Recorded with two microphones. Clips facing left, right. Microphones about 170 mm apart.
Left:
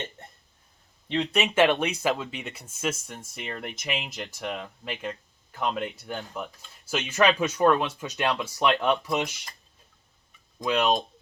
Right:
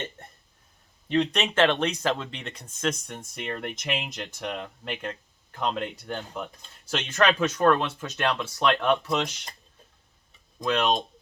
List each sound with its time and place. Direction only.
1.0 s speech: centre (ahead or behind)
1.6 s speech: 15° left (ahead or behind)
10.6 s speech: 10° left (ahead or behind)